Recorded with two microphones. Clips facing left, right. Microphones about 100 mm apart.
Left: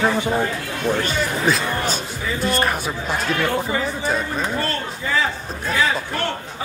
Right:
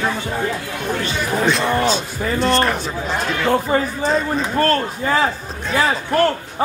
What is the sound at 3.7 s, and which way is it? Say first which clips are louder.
A man's voice: right 4 dB; 45° right (ahead or behind).